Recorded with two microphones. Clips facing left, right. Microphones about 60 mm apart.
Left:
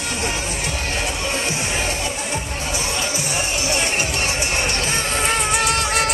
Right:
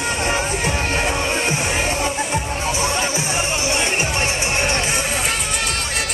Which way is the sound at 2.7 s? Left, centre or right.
Right.